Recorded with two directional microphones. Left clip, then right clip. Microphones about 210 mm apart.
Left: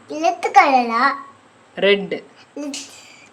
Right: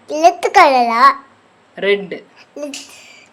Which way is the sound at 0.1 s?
50° right (ahead or behind).